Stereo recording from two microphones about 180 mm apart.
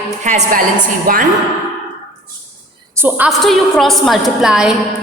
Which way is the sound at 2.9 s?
10° right (ahead or behind).